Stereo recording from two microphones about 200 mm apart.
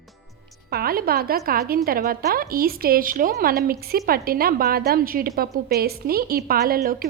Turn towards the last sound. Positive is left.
turn(degrees=-45)  # may be behind; listen again after turning